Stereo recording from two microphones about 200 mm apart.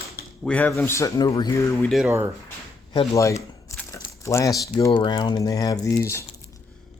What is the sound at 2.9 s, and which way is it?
Speech, 15° left (ahead or behind).